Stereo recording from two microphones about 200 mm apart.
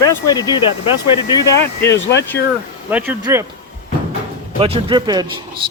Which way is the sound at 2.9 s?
10° right (ahead or behind).